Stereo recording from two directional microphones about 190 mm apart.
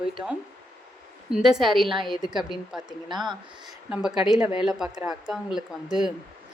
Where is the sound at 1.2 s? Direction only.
5° right (ahead or behind).